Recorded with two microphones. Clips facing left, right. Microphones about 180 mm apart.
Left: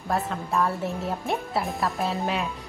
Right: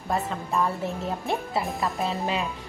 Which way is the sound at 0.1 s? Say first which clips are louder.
Left 1 dB; centre (ahead or behind).